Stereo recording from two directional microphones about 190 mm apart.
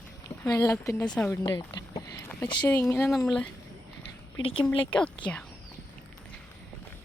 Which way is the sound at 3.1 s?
Centre (ahead or behind).